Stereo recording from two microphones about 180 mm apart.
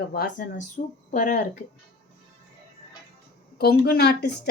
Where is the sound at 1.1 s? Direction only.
45° left (ahead or behind).